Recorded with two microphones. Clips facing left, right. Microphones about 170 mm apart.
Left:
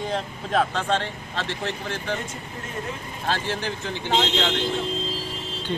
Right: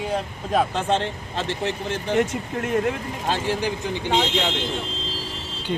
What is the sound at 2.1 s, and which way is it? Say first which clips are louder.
Speech: right 12 dB; 75° right (ahead or behind).